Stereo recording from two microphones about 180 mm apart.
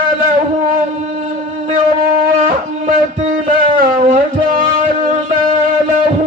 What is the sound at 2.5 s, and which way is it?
Music, 50° right (ahead or behind).